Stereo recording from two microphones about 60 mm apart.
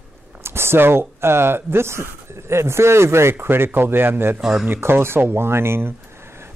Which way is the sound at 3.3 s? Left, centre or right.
Right.